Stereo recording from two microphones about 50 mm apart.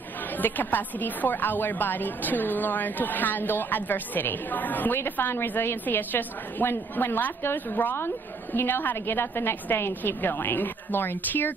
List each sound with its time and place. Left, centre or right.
0.4 s a woman's voice: left